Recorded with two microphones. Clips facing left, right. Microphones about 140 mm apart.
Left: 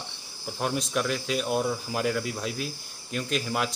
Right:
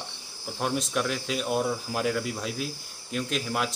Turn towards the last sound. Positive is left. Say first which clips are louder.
# left 1 dB
turn(degrees=0)  # may be behind; listen again after turning